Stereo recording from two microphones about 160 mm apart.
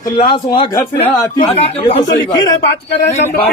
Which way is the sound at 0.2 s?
30° left (ahead or behind).